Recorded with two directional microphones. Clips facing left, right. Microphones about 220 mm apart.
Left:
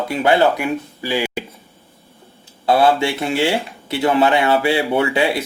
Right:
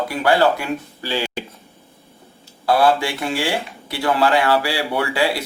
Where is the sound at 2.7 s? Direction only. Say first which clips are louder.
Left 2 dB; 25° left (ahead or behind).